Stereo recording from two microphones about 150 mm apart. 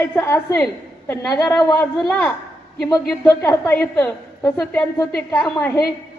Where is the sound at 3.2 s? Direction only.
20° left (ahead or behind).